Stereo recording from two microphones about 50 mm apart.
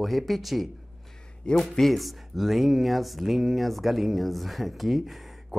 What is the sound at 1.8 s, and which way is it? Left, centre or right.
Speech, centre.